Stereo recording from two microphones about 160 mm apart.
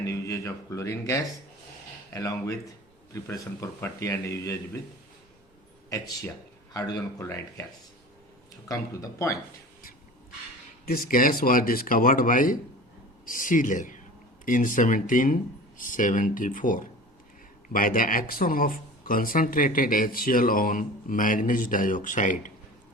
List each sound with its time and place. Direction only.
0.0 s a man's voice: 20° left (ahead or behind)
5.9 s speech: 20° left (ahead or behind)
8.6 s speech: 20° left (ahead or behind)
10.8 s speech: 65° left (ahead or behind)